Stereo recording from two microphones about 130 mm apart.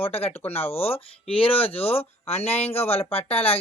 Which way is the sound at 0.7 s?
50° left (ahead or behind).